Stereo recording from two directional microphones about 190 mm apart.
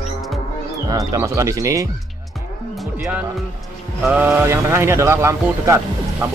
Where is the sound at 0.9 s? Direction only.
20° right (ahead or behind).